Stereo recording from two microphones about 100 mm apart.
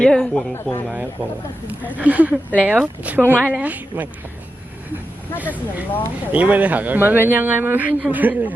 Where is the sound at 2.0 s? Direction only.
15° right (ahead or behind).